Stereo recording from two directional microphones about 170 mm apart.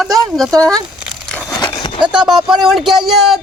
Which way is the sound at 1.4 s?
20° left (ahead or behind).